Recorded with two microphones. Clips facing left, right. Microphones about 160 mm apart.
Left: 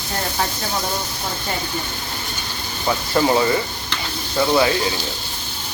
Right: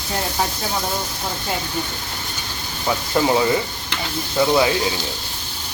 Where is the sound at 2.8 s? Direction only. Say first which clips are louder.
Left 1 dB; 5° right (ahead or behind).